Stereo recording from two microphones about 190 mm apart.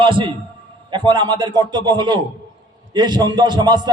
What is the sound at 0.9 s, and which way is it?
A man's voice, 25° right (ahead or behind).